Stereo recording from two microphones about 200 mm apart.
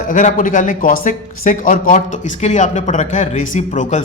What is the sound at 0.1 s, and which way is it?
A man's voice, 40° left (ahead or behind).